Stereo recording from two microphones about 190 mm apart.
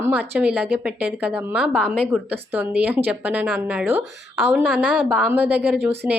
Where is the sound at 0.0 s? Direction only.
10° right (ahead or behind).